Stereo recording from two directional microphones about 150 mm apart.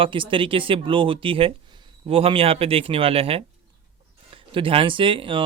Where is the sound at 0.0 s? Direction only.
35° right (ahead or behind).